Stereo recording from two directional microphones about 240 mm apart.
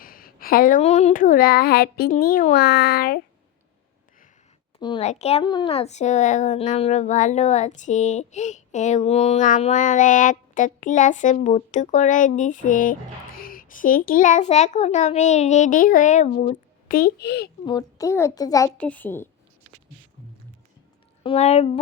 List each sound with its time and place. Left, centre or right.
0.0 s a child's voice: left
4.8 s a child's voice: left
17.7 s a child's voice: centre
21.2 s speech: left